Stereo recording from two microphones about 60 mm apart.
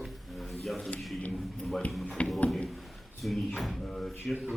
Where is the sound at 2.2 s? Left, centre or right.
Left.